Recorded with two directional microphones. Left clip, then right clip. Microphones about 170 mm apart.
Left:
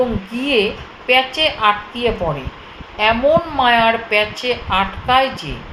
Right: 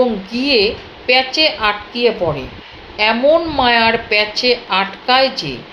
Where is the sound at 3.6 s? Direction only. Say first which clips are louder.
Right 1 dB; 20° right (ahead or behind).